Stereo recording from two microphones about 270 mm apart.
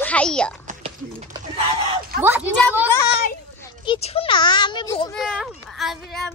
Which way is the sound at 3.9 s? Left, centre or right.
Left.